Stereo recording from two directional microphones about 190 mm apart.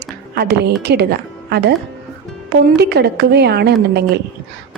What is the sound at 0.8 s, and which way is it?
Speech, 60° right (ahead or behind).